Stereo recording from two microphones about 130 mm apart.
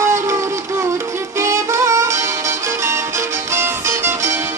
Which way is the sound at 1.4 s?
20° right (ahead or behind).